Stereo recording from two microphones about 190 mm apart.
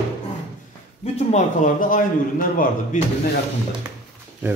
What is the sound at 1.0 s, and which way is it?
Speech, 35° left (ahead or behind).